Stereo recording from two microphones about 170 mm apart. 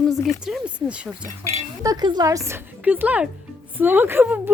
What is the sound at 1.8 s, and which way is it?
A woman's voice, 25° right (ahead or behind).